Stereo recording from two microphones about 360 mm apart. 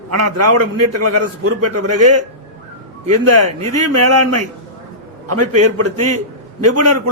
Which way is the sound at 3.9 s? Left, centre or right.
Right.